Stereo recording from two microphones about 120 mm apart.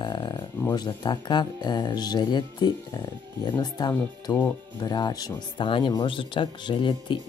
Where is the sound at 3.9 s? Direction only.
20° left (ahead or behind).